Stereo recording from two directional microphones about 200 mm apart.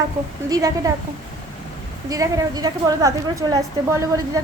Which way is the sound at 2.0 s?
15° right (ahead or behind).